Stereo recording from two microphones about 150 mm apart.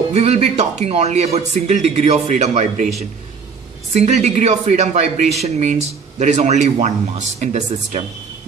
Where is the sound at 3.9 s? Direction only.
45° right (ahead or behind).